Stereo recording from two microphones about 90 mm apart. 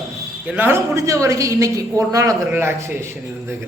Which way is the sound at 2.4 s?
20° right (ahead or behind).